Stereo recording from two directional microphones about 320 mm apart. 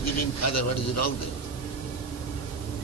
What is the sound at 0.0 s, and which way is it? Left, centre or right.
A man's voice, left.